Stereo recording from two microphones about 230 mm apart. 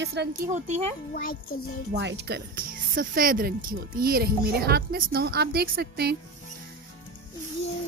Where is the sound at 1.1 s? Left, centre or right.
Left.